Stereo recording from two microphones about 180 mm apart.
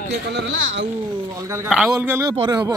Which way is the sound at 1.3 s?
15° right (ahead or behind).